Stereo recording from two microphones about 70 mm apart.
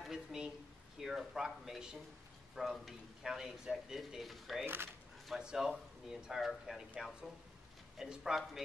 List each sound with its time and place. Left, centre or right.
0.0 s a sound: centre
0.9 s speech: centre
4.6 s speech: right
5.3 s speech: centre